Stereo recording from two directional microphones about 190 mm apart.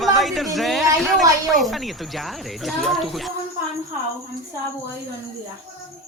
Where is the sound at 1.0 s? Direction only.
Centre (ahead or behind).